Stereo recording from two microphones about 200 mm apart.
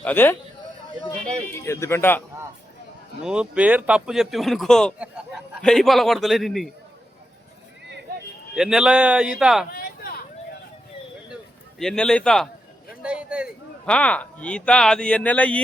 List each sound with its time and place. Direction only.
0.0 s speech: 10° left (ahead or behind)
3.2 s speech: 5° right (ahead or behind)
8.5 s speech: 5° right (ahead or behind)
9.6 s a sound: 50° left (ahead or behind)
11.8 s speech: 5° left (ahead or behind)
13.0 s a sound: 5° right (ahead or behind)
13.8 s speech: 5° left (ahead or behind)